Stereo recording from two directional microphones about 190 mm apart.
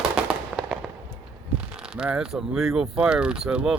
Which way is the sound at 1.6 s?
5° right (ahead or behind).